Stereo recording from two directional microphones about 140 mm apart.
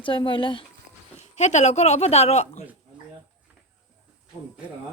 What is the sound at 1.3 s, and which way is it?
A woman's voice, 55° left (ahead or behind).